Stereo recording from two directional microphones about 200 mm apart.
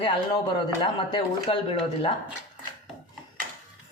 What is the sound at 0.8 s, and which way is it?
Speech, 25° left (ahead or behind).